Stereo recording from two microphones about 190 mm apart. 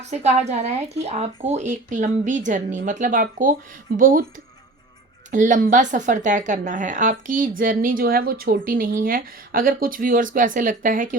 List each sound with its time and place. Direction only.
0.0 s speech: 35° right (ahead or behind)
5.3 s speech: 40° right (ahead or behind)